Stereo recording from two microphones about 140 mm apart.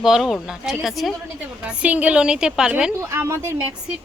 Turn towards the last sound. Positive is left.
turn(degrees=-15)  # may be behind; listen again after turning